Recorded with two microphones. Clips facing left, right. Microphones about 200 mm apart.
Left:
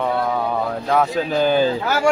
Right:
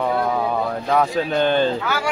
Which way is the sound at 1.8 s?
45° left (ahead or behind).